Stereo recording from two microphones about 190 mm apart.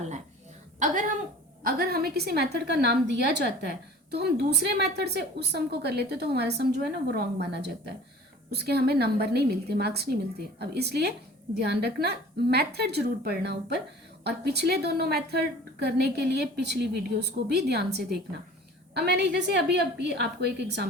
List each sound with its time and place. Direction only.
1.6 s a woman's voice: 50° right (ahead or behind)